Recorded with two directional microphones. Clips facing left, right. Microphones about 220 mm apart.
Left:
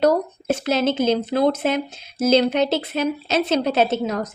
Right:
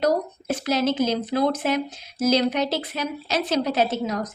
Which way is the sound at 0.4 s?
25° left (ahead or behind).